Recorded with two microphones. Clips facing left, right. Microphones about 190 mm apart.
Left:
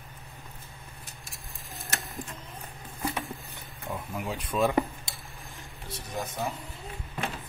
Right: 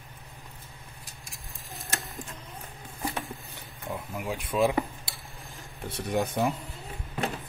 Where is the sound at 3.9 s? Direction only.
10° right (ahead or behind).